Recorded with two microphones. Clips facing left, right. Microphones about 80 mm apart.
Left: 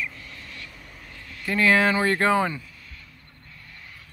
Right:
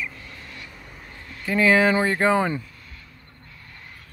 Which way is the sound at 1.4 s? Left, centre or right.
Centre.